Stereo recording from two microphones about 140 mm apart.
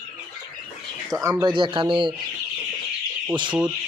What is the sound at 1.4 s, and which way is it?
Speech, 35° right (ahead or behind).